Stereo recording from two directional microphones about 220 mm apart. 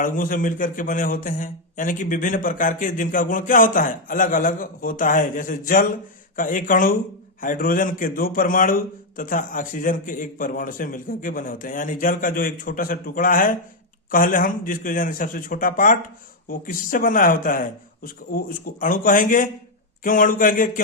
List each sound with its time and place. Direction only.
0.0 s a man's voice: 40° left (ahead or behind)